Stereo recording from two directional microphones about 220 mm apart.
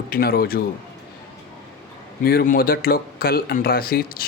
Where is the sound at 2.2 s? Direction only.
45° left (ahead or behind).